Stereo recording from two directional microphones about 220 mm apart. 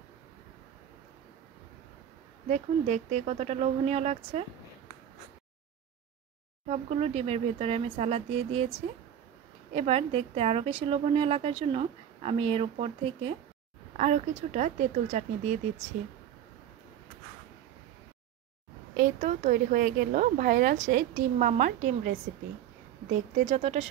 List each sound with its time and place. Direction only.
2.4 s a woman's voice: 30° right (ahead or behind)
6.7 s a woman's voice: 30° right (ahead or behind)
9.8 s a woman's voice: 25° right (ahead or behind)
18.9 s a woman's voice: 35° right (ahead or behind)
23.3 s a woman's voice: 30° right (ahead or behind)